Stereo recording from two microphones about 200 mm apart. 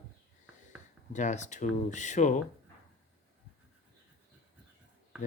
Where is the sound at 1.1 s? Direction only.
35° left (ahead or behind).